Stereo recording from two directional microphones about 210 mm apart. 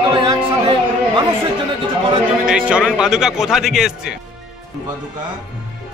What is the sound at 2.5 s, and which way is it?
A man's voice, 5° right (ahead or behind).